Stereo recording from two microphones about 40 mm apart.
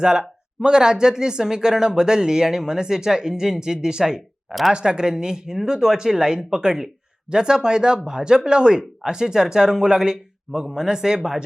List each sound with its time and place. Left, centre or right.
0.0 s speech: right